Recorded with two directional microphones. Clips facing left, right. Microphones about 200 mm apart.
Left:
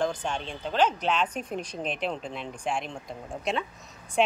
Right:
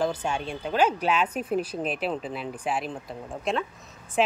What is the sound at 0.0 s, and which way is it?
Speech, 10° right (ahead or behind).